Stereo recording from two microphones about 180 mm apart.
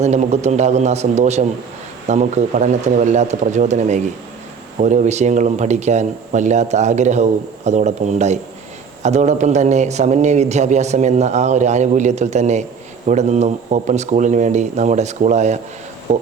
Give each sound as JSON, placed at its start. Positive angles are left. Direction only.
{"t": 0.0, "sound": "speech", "side_deg": -40}
{"t": 16.1, "sound": "music", "side_deg": -40}